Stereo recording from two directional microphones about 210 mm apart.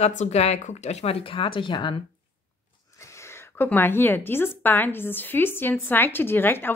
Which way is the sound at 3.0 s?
15° left (ahead or behind).